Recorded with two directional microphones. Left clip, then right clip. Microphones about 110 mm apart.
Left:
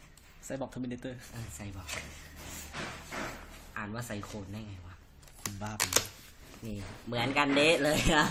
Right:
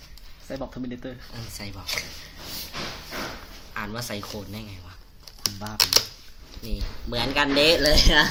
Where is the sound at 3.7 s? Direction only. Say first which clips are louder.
Right 8 dB; 20° right (ahead or behind).